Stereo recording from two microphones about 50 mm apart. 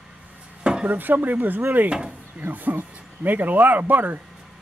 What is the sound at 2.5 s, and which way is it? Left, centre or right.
Speech, right.